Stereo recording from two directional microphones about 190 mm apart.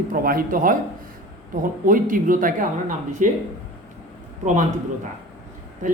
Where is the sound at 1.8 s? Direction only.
45° right (ahead or behind).